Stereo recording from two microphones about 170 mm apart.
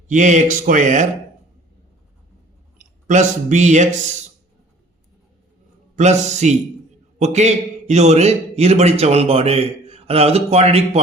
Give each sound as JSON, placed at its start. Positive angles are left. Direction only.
{"t": 0.1, "sound": "speech", "side_deg": -45}
{"t": 2.7, "sound": "speech", "side_deg": -45}
{"t": 6.0, "sound": "a man's voice", "side_deg": -45}